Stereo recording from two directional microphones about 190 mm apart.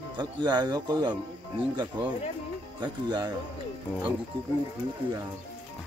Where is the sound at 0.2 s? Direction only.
25° right (ahead or behind).